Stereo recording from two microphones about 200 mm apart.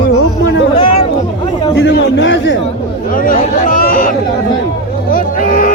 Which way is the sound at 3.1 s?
45° left (ahead or behind).